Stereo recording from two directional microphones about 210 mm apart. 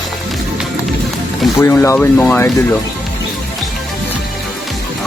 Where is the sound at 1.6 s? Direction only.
10° left (ahead or behind).